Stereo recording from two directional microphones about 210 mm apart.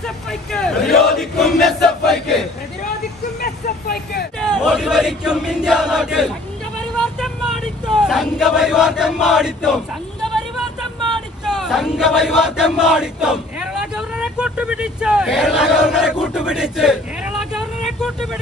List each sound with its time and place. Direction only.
0.0 s speech: centre (ahead or behind)
1.2 s battle cry: centre (ahead or behind)
3.3 s vehicle: 50° left (ahead or behind)
4.6 s chant: 5° right (ahead or behind)
7.2 s vehicle: centre (ahead or behind)
7.9 s chant: centre (ahead or behind)
11.4 s a sound: centre (ahead or behind)